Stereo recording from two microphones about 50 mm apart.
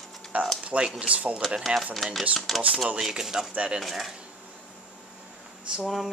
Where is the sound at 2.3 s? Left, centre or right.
Centre.